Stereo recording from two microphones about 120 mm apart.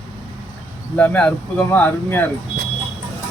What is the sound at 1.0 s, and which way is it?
Speech, 10° left (ahead or behind).